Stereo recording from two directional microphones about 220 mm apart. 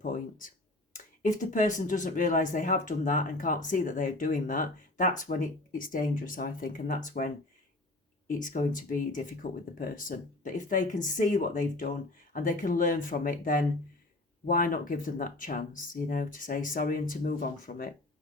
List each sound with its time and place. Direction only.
0.0 s speech: 40° left (ahead or behind)
8.3 s speech: 35° left (ahead or behind)